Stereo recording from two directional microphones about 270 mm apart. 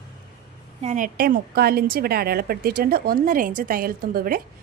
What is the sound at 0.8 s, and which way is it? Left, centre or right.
A woman's voice, right.